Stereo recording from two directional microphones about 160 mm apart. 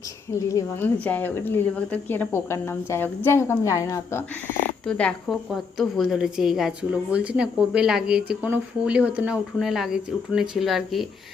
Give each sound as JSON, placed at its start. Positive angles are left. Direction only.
{"t": 0.3, "sound": "speech", "side_deg": 20}
{"t": 4.9, "sound": "a woman's voice", "side_deg": 5}